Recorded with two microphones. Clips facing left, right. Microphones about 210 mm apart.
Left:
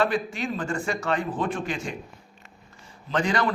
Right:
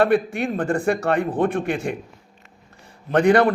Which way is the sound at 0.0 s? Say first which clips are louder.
Right 7 dB; 60° right (ahead or behind).